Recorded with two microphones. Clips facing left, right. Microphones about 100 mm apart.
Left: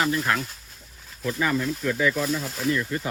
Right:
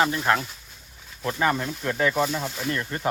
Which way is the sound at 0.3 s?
30° right (ahead or behind).